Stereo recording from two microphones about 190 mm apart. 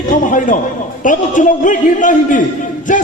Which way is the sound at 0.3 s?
45° left (ahead or behind).